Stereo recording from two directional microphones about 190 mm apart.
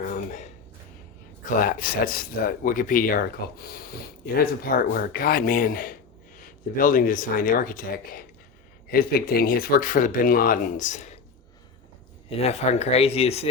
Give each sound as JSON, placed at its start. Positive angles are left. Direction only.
{"t": 0.1, "sound": "a sound", "side_deg": 40}
{"t": 1.6, "sound": "speech", "side_deg": 50}
{"t": 12.3, "sound": "speech", "side_deg": 35}